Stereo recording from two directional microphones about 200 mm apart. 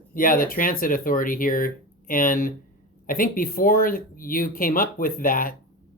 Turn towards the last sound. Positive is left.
turn(degrees=45)  # may be behind; listen again after turning